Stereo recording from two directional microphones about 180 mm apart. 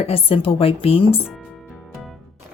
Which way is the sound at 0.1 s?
30° left (ahead or behind).